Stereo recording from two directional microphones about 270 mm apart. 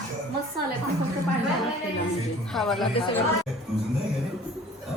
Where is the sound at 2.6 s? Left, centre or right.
Centre.